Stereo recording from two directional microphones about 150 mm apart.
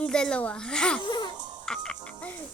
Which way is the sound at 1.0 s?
30° left (ahead or behind).